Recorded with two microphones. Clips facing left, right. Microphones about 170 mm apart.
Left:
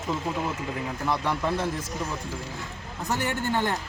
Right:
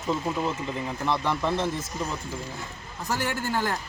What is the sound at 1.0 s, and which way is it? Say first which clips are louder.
Speech: right 1 dB; 10° left (ahead or behind).